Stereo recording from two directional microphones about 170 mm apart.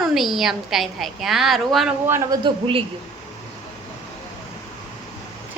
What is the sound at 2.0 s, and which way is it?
Speech, 15° right (ahead or behind).